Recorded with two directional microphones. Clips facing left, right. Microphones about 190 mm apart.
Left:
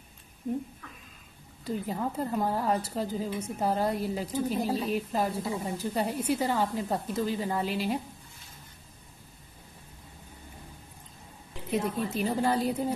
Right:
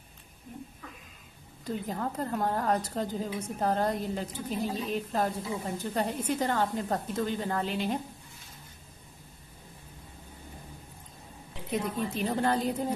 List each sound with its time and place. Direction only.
1.7 s a woman's voice: 5° left (ahead or behind)
4.6 s a woman's voice: 35° left (ahead or behind)
4.9 s a woman's voice: 5° left (ahead or behind)
11.7 s a woman's voice: 5° left (ahead or behind)